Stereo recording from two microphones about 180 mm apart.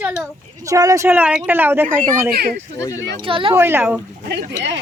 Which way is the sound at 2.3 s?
60° right (ahead or behind).